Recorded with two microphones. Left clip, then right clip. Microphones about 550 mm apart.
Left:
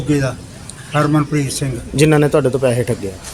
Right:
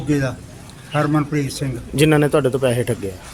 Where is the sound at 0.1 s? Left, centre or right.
Right.